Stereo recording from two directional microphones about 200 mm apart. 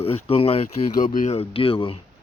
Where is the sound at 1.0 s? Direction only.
40° left (ahead or behind).